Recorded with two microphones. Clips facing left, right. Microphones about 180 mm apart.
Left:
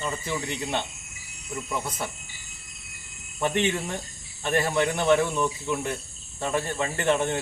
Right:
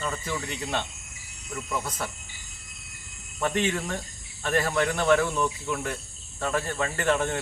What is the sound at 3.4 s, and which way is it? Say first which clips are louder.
Speech: left 1 dB; 20° left (ahead or behind).